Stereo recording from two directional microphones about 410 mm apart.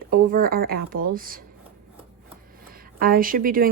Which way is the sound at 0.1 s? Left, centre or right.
Right.